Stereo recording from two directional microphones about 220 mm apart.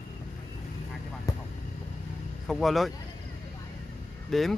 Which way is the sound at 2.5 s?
Centre (ahead or behind).